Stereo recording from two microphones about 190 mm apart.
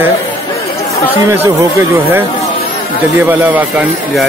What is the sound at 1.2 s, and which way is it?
Speech, 15° right (ahead or behind).